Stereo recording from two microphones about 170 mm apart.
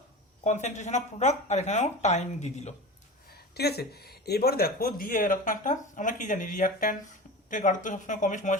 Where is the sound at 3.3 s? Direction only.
70° left (ahead or behind).